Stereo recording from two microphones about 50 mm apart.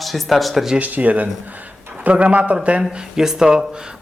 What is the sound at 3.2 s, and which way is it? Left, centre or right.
Speech, centre.